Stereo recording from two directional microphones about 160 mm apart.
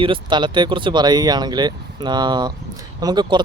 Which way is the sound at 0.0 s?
30° right (ahead or behind).